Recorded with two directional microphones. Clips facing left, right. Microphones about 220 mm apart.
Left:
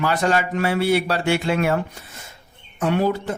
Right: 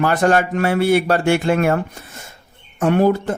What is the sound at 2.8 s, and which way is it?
Speech, 50° right (ahead or behind).